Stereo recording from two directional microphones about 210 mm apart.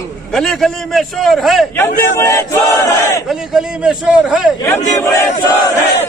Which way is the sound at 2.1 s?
15° left (ahead or behind).